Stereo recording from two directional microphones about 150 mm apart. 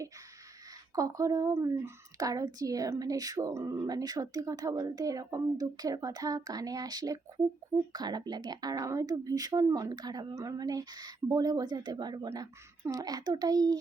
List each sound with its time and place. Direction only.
0.9 s a woman's voice: 20° right (ahead or behind)